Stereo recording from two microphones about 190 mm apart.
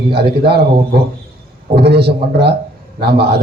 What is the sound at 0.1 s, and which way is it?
A man's voice, 60° right (ahead or behind).